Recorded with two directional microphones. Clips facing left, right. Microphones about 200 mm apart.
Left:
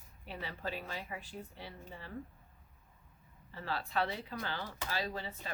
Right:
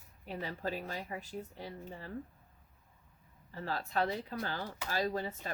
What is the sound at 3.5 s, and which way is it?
Speech, 40° right (ahead or behind).